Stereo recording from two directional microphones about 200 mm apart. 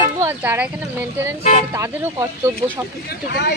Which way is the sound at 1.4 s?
35° left (ahead or behind).